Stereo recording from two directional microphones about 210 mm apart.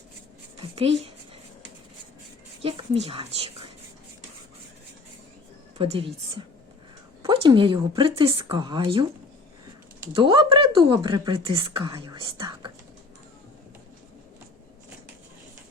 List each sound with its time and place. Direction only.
0.8 s speech: 30° right (ahead or behind)
2.6 s speech: 25° right (ahead or behind)
5.7 s a woman's voice: 25° right (ahead or behind)
7.2 s speech: 20° right (ahead or behind)
10.2 s speech: 25° right (ahead or behind)